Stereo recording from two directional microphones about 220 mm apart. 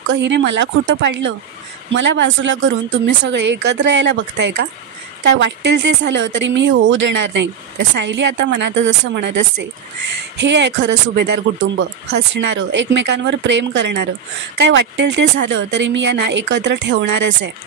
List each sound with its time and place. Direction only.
0.1 s speech: 55° right (ahead or behind)